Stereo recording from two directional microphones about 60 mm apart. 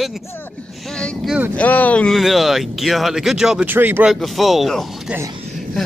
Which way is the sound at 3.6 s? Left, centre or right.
Right.